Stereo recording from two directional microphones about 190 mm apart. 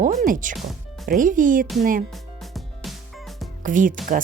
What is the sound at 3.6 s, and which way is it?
Speech, 45° right (ahead or behind).